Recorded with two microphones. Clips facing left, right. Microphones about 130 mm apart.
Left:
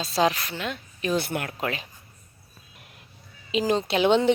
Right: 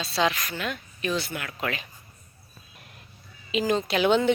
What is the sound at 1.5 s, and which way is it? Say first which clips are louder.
Speech: left 1 dB; 35° left (ahead or behind).